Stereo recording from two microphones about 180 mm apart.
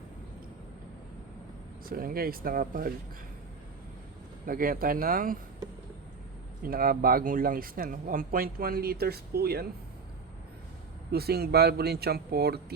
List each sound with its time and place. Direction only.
1.8 s speech: 55° right (ahead or behind)
4.4 s speech: 50° right (ahead or behind)
6.6 s speech: 55° right (ahead or behind)
11.1 s speech: 60° right (ahead or behind)